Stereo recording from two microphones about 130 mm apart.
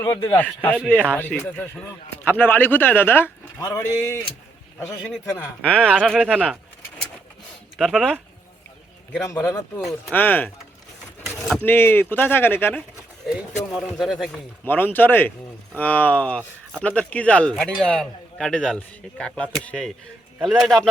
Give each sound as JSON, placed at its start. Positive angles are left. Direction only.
{"t": 0.0, "sound": "a man's voice", "side_deg": 20}
{"t": 5.6, "sound": "a man's voice", "side_deg": 10}
{"t": 7.8, "sound": "speech", "side_deg": 5}
{"t": 9.4, "sound": "a man's voice", "side_deg": 15}
{"t": 11.6, "sound": "a man's voice", "side_deg": 15}
{"t": 13.7, "sound": "speech", "side_deg": 0}
{"t": 14.6, "sound": "a man's voice", "side_deg": 15}